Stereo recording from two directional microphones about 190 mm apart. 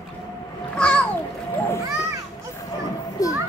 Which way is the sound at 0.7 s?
5° left (ahead or behind).